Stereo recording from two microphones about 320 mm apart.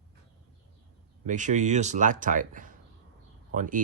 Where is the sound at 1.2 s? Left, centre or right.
Right.